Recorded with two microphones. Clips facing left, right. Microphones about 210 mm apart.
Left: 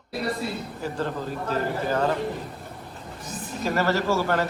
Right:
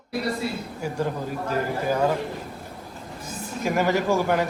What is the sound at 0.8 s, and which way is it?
Speech, 10° right (ahead or behind).